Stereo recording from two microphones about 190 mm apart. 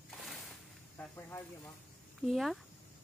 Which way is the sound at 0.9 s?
10° left (ahead or behind).